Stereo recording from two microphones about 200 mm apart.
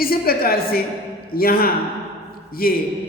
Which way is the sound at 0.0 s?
50° left (ahead or behind).